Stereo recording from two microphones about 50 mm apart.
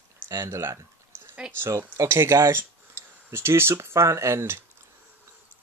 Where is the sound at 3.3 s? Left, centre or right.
Right.